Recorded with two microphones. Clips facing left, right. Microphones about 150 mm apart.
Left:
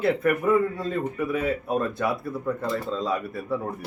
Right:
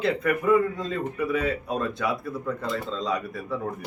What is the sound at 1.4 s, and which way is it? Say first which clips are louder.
Speech: left 2 dB; 5° left (ahead or behind).